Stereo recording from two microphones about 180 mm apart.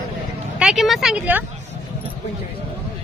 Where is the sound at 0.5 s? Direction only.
Centre (ahead or behind).